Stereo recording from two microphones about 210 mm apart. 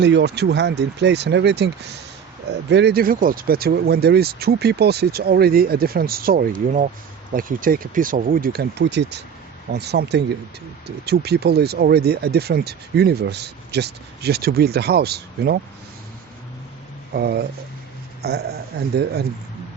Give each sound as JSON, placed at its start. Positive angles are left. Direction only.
{"t": 0.0, "sound": "speech", "side_deg": -55}
{"t": 17.2, "sound": "speech", "side_deg": -50}